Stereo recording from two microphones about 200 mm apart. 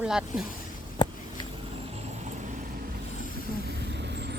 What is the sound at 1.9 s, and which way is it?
Mechanisms, 35° right (ahead or behind).